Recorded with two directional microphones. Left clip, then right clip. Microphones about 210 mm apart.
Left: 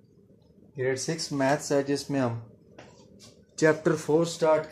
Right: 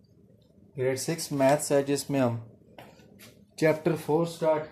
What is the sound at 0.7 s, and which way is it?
Speech, 20° right (ahead or behind).